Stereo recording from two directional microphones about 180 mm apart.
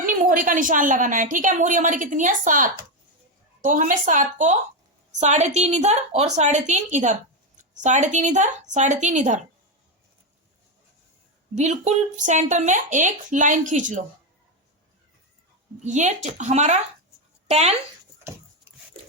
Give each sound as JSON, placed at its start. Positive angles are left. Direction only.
{"t": 0.0, "sound": "a woman's voice", "side_deg": -50}
{"t": 11.5, "sound": "a woman's voice", "side_deg": -40}
{"t": 15.8, "sound": "a woman's voice", "side_deg": -40}